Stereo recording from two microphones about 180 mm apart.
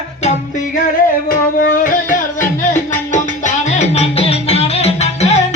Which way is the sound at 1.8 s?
50° left (ahead or behind).